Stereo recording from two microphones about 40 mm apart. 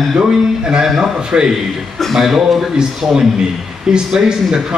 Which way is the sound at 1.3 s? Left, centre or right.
Right.